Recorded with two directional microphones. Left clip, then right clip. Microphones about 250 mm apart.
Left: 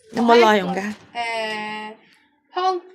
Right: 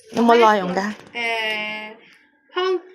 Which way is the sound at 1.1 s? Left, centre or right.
Centre.